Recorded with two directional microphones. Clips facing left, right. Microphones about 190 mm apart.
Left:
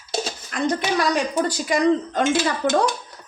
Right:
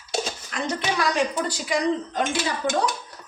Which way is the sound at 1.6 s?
50° left (ahead or behind).